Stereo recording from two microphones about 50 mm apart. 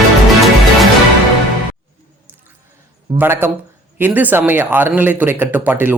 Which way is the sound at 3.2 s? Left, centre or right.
Right.